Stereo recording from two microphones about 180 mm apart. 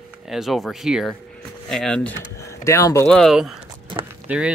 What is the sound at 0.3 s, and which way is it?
Speech, centre (ahead or behind).